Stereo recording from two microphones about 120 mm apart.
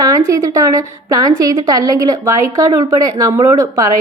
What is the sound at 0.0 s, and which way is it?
A woman's voice, 30° right (ahead or behind).